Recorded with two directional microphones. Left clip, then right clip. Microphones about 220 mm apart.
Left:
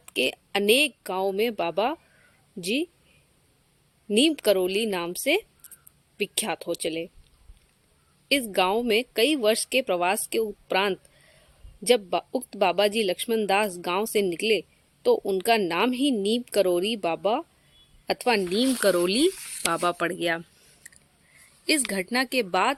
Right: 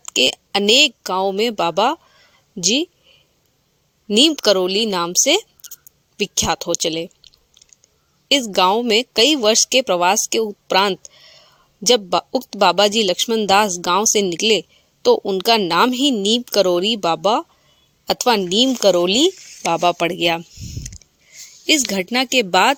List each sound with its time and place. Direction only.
0.0 s speech: 25° right (ahead or behind)
4.1 s speech: 30° right (ahead or behind)
8.3 s speech: 25° right (ahead or behind)
18.7 s speech: 15° right (ahead or behind)
21.7 s speech: 25° right (ahead or behind)